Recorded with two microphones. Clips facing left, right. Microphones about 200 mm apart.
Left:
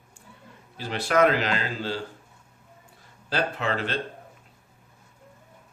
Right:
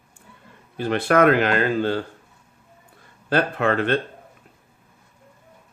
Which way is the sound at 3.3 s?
55° right (ahead or behind).